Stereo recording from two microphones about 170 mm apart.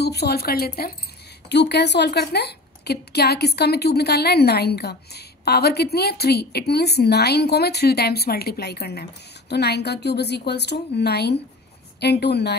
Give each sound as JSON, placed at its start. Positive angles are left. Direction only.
{"t": 0.0, "sound": "a woman's voice", "side_deg": 70}
{"t": 1.5, "sound": "a woman's voice", "side_deg": 85}